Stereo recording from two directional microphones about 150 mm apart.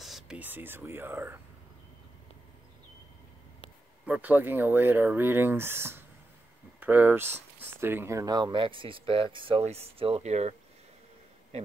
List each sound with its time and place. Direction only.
0.0 s speech: 5° right (ahead or behind)
4.0 s speech: 10° right (ahead or behind); by 10.5 s 45° right (ahead or behind)